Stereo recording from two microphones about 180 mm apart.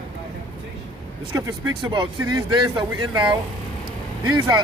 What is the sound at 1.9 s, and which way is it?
Speech, 25° right (ahead or behind).